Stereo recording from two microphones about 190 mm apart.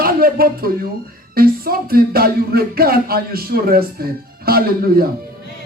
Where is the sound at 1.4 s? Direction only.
50° right (ahead or behind).